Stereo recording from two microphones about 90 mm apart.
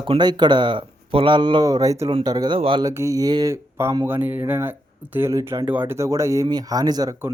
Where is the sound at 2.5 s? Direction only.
75° right (ahead or behind).